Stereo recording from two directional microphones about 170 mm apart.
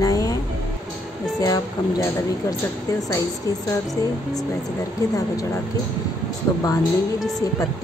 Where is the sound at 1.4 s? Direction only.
20° left (ahead or behind).